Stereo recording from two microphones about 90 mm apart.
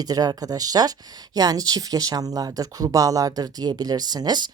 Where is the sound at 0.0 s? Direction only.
45° right (ahead or behind).